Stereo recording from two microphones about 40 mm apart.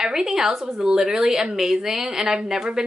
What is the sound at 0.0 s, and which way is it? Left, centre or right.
Speech, centre.